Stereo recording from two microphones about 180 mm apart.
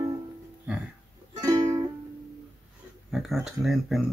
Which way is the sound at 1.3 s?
20° right (ahead or behind).